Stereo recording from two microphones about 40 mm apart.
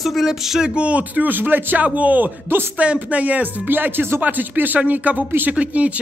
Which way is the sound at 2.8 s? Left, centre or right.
Right.